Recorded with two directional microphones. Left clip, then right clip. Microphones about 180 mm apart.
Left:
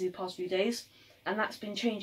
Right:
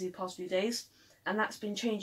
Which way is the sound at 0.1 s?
15° right (ahead or behind).